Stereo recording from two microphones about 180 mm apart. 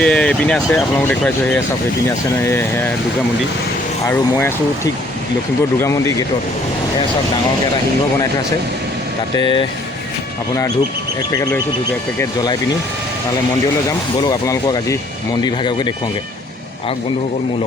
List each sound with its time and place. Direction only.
0.0 s speech: 5° left (ahead or behind)
2.4 s speech: 15° left (ahead or behind)
4.0 s speech: 10° left (ahead or behind)
5.8 s speech: 15° left (ahead or behind)
11.3 s speech: 20° left (ahead or behind)
14.3 s speech: 20° left (ahead or behind)